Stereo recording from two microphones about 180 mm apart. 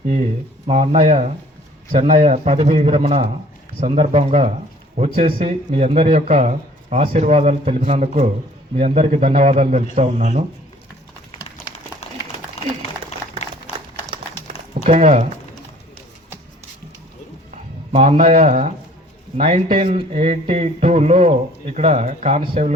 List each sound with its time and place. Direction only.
0.0 s speech: 45° right (ahead or behind)
13.7 s a sound: 35° left (ahead or behind)
14.8 s speech: 35° right (ahead or behind)
17.5 s speech: 40° right (ahead or behind)